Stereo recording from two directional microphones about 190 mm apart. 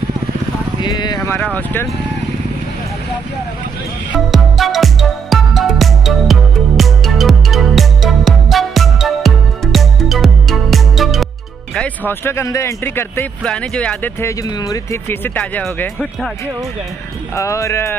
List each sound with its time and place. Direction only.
0.7 s speech: 20° left (ahead or behind)
4.3 s music: centre (ahead or behind)
11.7 s speech: 10° left (ahead or behind)
17.4 s speech: 15° left (ahead or behind)